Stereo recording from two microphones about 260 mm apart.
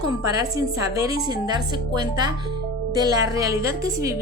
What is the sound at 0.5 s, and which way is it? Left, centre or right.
A woman's voice, centre.